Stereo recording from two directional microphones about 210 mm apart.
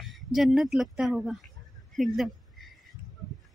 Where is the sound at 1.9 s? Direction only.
Centre (ahead or behind).